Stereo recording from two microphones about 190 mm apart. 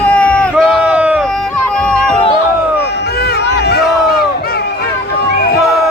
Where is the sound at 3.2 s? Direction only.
60° left (ahead or behind).